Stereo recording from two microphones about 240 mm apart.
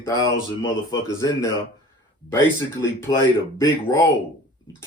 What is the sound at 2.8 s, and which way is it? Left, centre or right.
Speech, centre.